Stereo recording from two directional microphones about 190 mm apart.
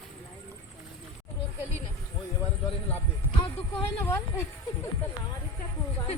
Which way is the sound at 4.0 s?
10° left (ahead or behind).